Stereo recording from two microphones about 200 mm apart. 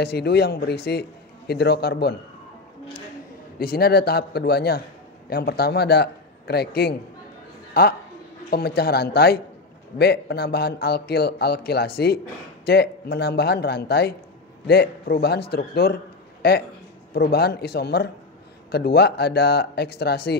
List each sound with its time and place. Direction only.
0.0 s speech: 55° left (ahead or behind)
3.5 s speech: 50° left (ahead or behind)